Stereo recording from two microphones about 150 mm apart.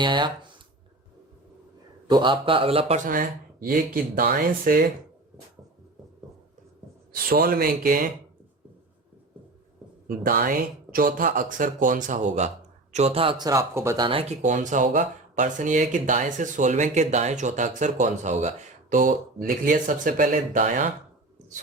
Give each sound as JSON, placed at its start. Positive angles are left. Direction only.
{"t": 0.0, "sound": "speech", "side_deg": -30}
{"t": 2.0, "sound": "speech", "side_deg": -30}
{"t": 3.0, "sound": "speech", "side_deg": -70}
{"t": 7.1, "sound": "speech", "side_deg": -85}
{"t": 10.2, "sound": "speech", "side_deg": -75}
{"t": 14.4, "sound": "speech", "side_deg": -55}